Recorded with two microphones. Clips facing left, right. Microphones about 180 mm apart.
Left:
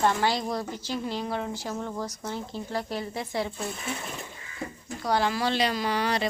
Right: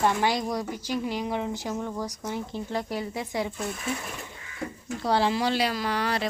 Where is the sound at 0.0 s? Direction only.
15° right (ahead or behind).